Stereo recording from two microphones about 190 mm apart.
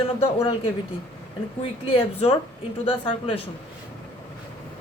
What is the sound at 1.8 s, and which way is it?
Speech, 30° left (ahead or behind).